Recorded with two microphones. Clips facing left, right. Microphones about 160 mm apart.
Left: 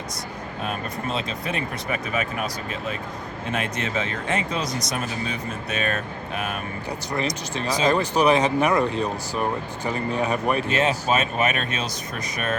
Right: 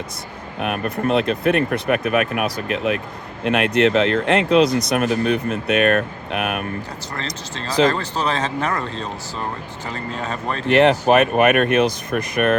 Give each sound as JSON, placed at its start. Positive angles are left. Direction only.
{"t": 0.6, "sound": "speech", "side_deg": -70}
{"t": 7.1, "sound": "speech", "side_deg": 15}
{"t": 10.7, "sound": "speech", "side_deg": -65}